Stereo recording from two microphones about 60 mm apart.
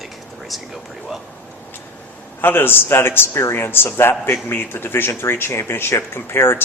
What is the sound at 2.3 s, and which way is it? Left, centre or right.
Speech, left.